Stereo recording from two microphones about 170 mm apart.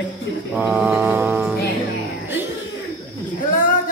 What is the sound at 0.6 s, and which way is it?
Mantra, 10° right (ahead or behind).